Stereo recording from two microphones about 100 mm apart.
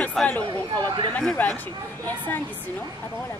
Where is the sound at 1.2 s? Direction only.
15° left (ahead or behind).